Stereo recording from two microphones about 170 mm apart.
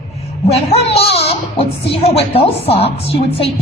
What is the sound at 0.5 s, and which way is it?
A woman's voice, 35° left (ahead or behind).